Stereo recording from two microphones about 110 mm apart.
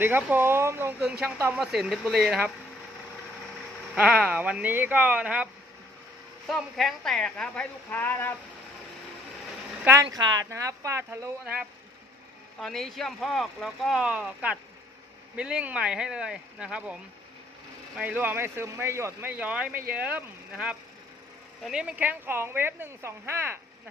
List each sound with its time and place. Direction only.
0.0 s speech: 20° right (ahead or behind)
1.5 s speech: 5° right (ahead or behind)
3.9 s speech: 5° right (ahead or behind)
6.5 s a woman's voice: centre (ahead or behind); by 8.4 s 20° left (ahead or behind)
10.1 s speech: 35° right (ahead or behind)
12.5 s speech: 5° left (ahead or behind)
18.0 s speech: 15° right (ahead or behind)
19.3 s speech: 10° right (ahead or behind)